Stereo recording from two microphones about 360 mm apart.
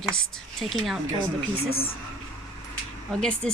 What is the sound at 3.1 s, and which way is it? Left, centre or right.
Speech, centre.